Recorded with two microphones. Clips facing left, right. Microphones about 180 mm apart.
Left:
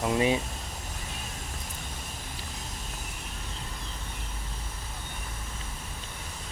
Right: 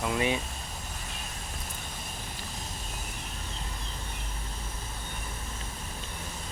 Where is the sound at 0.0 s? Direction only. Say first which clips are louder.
Left 3 dB; 25° left (ahead or behind).